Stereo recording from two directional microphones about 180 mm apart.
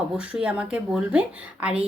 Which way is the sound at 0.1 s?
5° right (ahead or behind).